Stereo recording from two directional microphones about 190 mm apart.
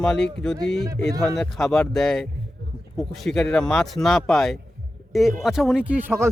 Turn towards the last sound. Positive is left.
turn(degrees=-10)  # may be behind; listen again after turning